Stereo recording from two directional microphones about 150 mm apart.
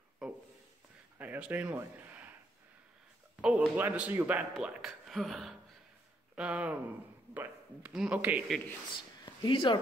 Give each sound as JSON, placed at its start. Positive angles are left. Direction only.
{"t": 0.2, "sound": "a sound", "side_deg": -5}
{"t": 1.1, "sound": "speech", "side_deg": -10}
{"t": 3.3, "sound": "a man's voice", "side_deg": -5}
{"t": 9.2, "sound": "speech", "side_deg": 30}